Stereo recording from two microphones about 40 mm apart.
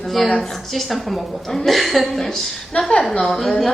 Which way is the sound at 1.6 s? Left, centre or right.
Centre.